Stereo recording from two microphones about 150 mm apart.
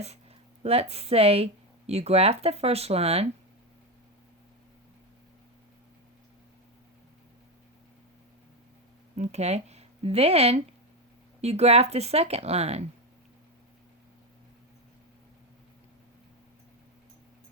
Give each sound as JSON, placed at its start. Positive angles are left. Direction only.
{"t": 0.6, "sound": "speech", "side_deg": -40}
{"t": 9.1, "sound": "speech", "side_deg": -50}